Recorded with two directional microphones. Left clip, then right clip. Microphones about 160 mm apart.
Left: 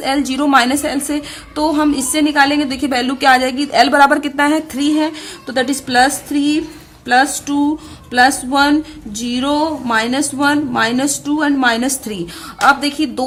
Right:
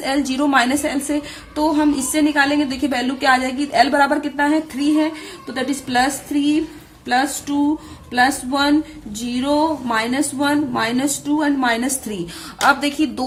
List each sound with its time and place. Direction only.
0.0 s a woman's voice: 20° left (ahead or behind); by 4.6 s 40° left (ahead or behind)
5.5 s a woman's voice: 30° left (ahead or behind)